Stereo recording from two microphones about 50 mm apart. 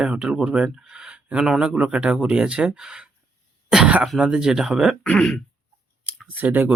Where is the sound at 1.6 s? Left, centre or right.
Centre.